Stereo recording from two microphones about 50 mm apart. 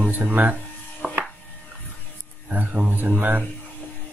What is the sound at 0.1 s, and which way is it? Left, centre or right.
Speech, right.